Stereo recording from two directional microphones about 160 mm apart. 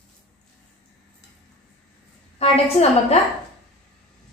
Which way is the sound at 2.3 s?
40° left (ahead or behind).